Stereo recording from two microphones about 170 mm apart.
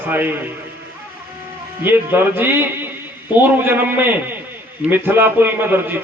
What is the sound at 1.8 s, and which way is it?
A man's voice, 10° right (ahead or behind).